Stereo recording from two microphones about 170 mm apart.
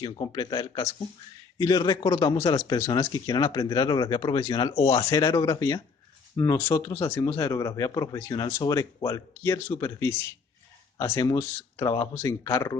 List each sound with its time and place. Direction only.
0.0 s speech: 25° left (ahead or behind)